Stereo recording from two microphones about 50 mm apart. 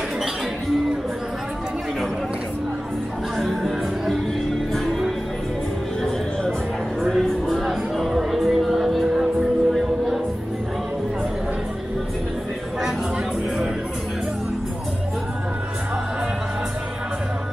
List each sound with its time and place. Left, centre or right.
3.3 s music: centre
7.0 s music: centre